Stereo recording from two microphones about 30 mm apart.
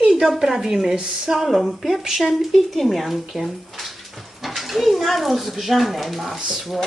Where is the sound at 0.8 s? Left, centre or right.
Right.